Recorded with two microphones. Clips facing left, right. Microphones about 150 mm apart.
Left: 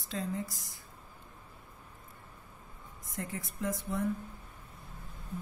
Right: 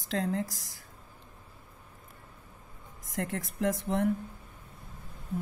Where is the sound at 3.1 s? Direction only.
85° right.